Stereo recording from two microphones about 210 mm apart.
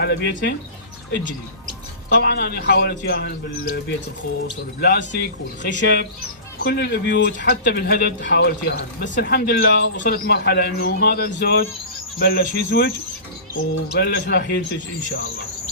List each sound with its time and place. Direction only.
0.0 s speech: 50° left (ahead or behind)
2.0 s speech: 50° left (ahead or behind)